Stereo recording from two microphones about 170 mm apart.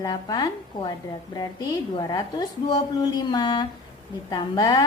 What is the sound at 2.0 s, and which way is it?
A woman's voice, 25° left (ahead or behind).